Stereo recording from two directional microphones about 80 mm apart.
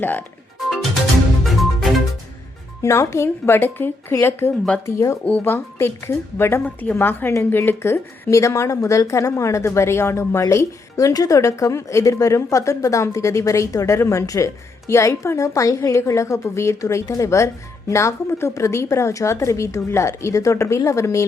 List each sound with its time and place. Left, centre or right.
0.0 s speech: left
2.8 s speech: left
4.9 s speech: left
5.2 s speech: left
6.7 s speech: left
8.3 s a woman's voice: left